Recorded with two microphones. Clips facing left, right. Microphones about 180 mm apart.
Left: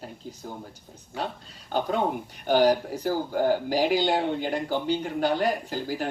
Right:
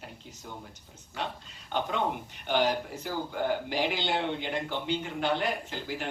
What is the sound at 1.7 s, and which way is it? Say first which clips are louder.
Speech: left 4 dB; 35° left (ahead or behind).